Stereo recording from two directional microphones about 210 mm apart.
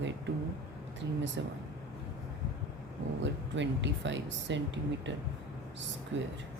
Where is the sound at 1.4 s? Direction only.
60° right (ahead or behind).